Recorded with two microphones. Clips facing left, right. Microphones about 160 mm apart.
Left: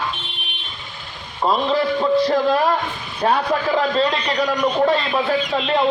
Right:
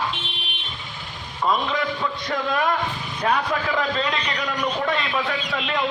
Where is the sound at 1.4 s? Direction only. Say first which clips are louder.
Left 5 dB; 30° left (ahead or behind).